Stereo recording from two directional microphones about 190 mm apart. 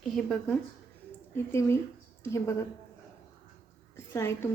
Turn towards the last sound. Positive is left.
turn(degrees=15)  # may be behind; listen again after turning